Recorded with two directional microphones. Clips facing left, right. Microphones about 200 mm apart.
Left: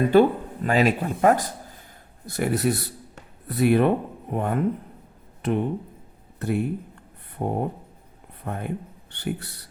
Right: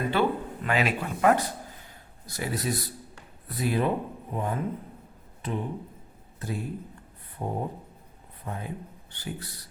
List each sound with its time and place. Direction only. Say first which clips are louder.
0.1 s a man's voice: left 9 dB; 40° left (ahead or behind)
2.2 s speech: left 8 dB; 60° left (ahead or behind)